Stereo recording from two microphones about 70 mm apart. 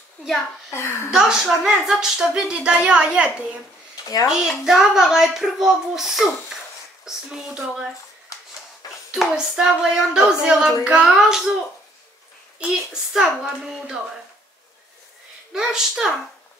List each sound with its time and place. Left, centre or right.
0.7 s a child's voice: left
1.1 s a woman's voice: centre
4.0 s speech: left
4.3 s a child's voice: centre
8.3 s rub: left
9.1 s a woman's voice: centre
12.5 s a child's voice: centre
15.5 s a woman's voice: centre